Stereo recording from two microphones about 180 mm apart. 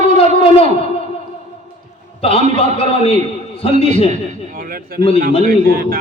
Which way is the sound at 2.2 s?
35° left (ahead or behind).